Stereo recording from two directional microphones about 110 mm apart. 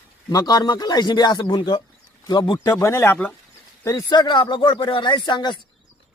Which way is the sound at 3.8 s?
35° left (ahead or behind).